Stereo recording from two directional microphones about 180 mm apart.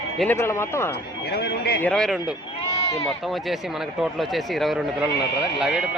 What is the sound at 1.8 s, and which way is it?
Speech, 5° left (ahead or behind).